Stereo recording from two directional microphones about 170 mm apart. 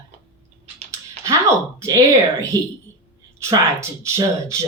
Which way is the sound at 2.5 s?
20° right (ahead or behind).